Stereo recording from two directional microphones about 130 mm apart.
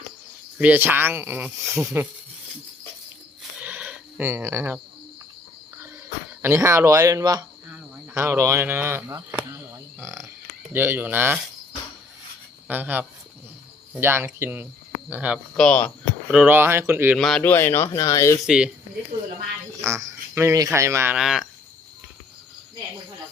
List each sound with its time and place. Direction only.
0.6 s speech: 15° right (ahead or behind)
3.6 s a sound: 10° right (ahead or behind)
6.4 s speech: 20° right (ahead or behind)
12.6 s speech: 15° right (ahead or behind)
15.5 s speech: 5° left (ahead or behind)
16.3 s speech: 5° right (ahead or behind)
16.6 s speech: 20° right (ahead or behind)
17.2 s speech: 5° left (ahead or behind)
17.4 s speech: 20° left (ahead or behind)
17.8 s speech: 30° left (ahead or behind)
18.3 s speech: 5° right (ahead or behind)
19.8 s speech: 25° right (ahead or behind)
21.2 s speech: 5° right (ahead or behind)